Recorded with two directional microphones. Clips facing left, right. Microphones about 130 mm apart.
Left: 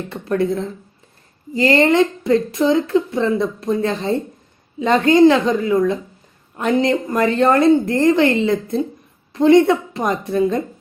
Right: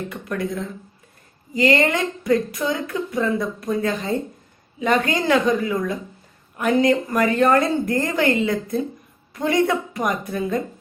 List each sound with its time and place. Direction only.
0.1 s a woman's voice: 30° left (ahead or behind)